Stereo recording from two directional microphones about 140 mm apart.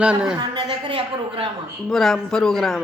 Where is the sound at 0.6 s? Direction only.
35° right (ahead or behind).